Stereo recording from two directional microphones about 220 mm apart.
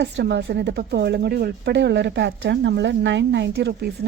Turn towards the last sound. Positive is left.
turn(degrees=-50)  # may be behind; listen again after turning